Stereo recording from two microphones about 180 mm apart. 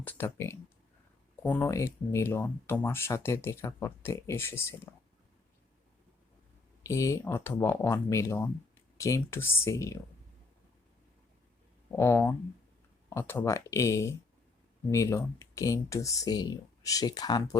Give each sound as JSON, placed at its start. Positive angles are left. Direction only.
{"t": 0.0, "sound": "speech", "side_deg": 10}
{"t": 6.8, "sound": "speech", "side_deg": 15}
{"t": 11.9, "sound": "speech", "side_deg": 15}